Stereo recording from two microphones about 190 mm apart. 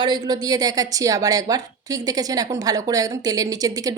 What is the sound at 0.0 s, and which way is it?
A woman's voice, 20° right (ahead or behind).